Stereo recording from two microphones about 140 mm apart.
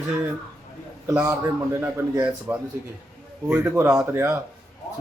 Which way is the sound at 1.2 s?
20° right (ahead or behind).